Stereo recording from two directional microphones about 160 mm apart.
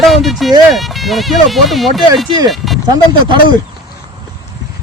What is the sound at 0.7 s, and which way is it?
Speech, centre (ahead or behind).